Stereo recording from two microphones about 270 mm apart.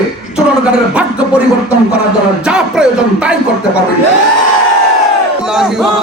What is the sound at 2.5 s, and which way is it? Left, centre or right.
Speech, centre.